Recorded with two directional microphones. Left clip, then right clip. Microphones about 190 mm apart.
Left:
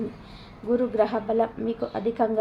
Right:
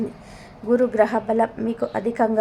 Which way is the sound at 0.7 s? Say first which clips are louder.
Right 5 dB; 35° right (ahead or behind).